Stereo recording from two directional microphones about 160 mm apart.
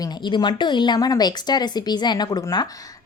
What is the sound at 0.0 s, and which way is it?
A woman's voice, 30° left (ahead or behind).